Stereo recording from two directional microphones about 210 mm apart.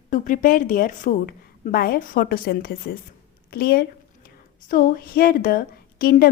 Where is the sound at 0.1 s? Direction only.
40° left (ahead or behind).